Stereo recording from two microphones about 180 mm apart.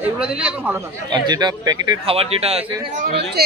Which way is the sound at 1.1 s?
25° right (ahead or behind).